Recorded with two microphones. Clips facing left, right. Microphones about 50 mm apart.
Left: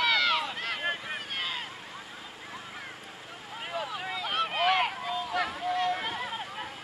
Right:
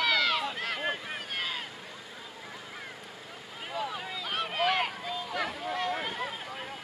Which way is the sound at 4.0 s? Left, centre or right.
Left.